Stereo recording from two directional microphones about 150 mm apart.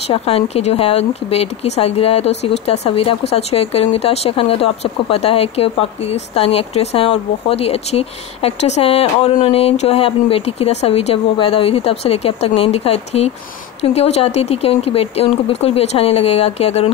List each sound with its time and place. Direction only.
0.1 s speech: 45° left (ahead or behind)